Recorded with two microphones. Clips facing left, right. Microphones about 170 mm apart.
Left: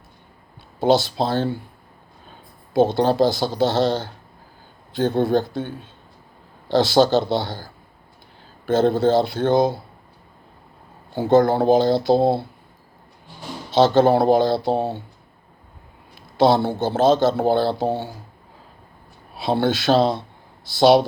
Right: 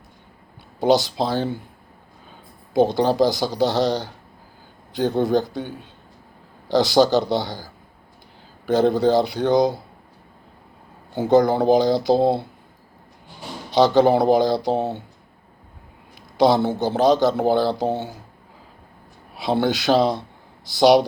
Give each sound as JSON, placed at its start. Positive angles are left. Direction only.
{"t": 0.8, "sound": "speech", "side_deg": -15}
{"t": 2.9, "sound": "speech", "side_deg": -15}
{"t": 5.2, "sound": "speech", "side_deg": -15}
{"t": 11.1, "sound": "speech", "side_deg": -15}
{"t": 13.7, "sound": "speech", "side_deg": -15}
{"t": 16.4, "sound": "speech", "side_deg": -20}
{"t": 19.4, "sound": "speech", "side_deg": -20}